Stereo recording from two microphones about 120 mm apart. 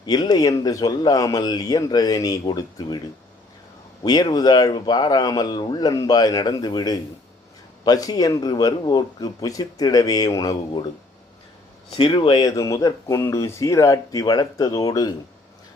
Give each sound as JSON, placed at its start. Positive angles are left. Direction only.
{"t": 0.0, "sound": "speech", "side_deg": 35}
{"t": 4.0, "sound": "speech", "side_deg": 35}
{"t": 11.9, "sound": "speech", "side_deg": 50}
{"t": 12.4, "sound": "speech", "side_deg": 30}